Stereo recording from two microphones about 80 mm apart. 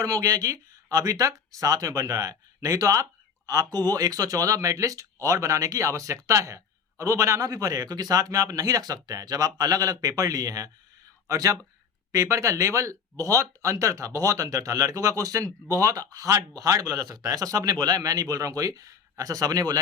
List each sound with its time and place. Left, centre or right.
0.0 s speech: right